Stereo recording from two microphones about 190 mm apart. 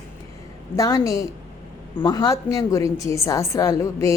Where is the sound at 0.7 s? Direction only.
20° left (ahead or behind).